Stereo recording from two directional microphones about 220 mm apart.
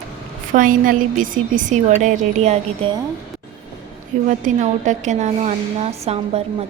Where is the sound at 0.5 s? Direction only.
40° right (ahead or behind).